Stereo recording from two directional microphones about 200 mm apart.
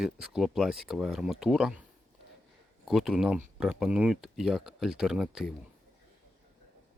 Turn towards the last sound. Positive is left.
turn(degrees=-5)  # may be behind; listen again after turning